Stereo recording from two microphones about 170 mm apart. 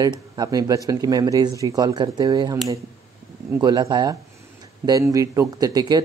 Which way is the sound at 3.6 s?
25° right (ahead or behind).